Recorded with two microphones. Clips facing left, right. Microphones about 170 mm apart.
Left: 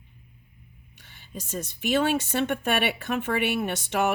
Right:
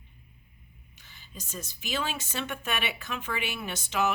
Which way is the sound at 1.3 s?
50° left (ahead or behind).